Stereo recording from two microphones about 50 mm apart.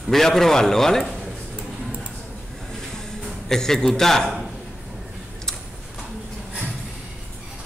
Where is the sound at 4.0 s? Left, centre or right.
Centre.